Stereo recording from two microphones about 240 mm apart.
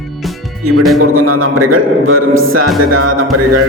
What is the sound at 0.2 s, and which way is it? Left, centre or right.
Music, centre.